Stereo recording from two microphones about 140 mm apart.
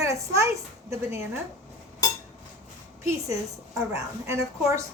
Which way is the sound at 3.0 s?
20° right (ahead or behind).